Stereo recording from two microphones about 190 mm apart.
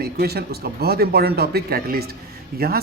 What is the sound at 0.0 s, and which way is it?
A man's voice, 55° right (ahead or behind).